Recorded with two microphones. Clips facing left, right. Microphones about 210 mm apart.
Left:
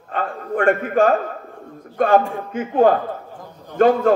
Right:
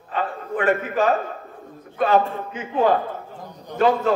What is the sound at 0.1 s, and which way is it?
A man's voice, 50° left (ahead or behind).